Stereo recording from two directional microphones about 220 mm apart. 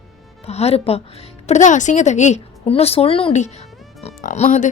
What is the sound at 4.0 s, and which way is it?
Music, 35° left (ahead or behind).